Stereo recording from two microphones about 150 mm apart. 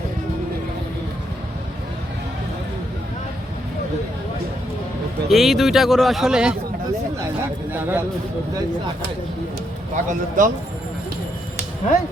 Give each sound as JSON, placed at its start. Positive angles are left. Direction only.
{"t": 5.3, "sound": "speech", "side_deg": 0}
{"t": 7.7, "sound": "speech", "side_deg": -15}
{"t": 9.9, "sound": "a man's voice", "side_deg": -60}